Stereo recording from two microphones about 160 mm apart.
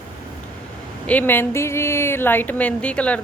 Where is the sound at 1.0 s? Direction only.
10° left (ahead or behind).